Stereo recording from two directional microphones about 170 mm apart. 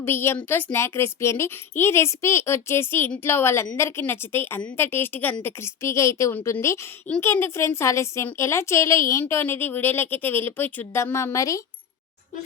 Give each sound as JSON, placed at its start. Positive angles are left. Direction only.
{"t": 0.0, "sound": "a woman's voice", "side_deg": 15}